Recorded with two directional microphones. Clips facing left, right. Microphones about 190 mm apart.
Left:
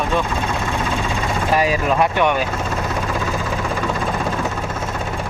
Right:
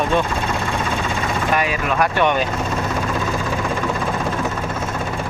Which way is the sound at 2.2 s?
10° left (ahead or behind).